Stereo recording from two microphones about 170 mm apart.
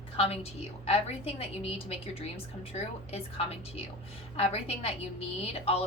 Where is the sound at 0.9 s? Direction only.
35° left (ahead or behind).